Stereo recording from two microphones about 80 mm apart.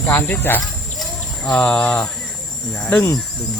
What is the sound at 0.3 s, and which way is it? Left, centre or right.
Speech, left.